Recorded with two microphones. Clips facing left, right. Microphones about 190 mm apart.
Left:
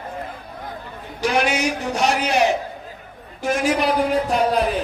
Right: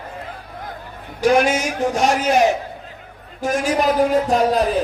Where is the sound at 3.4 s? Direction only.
45° right (ahead or behind).